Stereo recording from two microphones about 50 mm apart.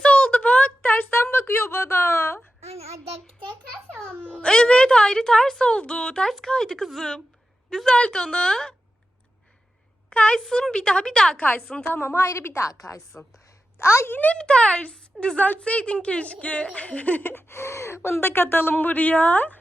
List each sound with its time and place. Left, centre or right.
0.0 s a sound: left
0.8 s a sound: left
4.4 s a woman's voice: centre
10.1 s a woman's voice: left
11.3 s a woman's voice: left
11.6 s a woman's voice: centre
11.9 s a woman's voice: left
13.1 s a woman's voice: left
13.7 s a woman's voice: left
14.1 s a woman's voice: left
14.3 s a woman's voice: centre
17.3 s speech: left